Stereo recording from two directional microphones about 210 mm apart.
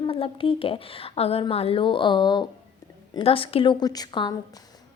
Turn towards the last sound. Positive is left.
turn(degrees=20)  # may be behind; listen again after turning